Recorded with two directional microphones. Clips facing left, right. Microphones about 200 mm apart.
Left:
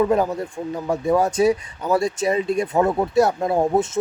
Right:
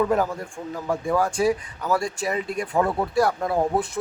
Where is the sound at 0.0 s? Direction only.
20° left (ahead or behind).